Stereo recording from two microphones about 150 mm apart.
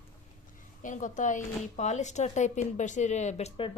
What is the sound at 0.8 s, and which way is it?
A woman's voice, 55° left (ahead or behind).